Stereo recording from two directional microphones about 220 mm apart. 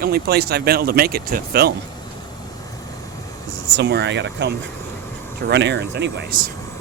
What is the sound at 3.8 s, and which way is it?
Speech, 50° right (ahead or behind).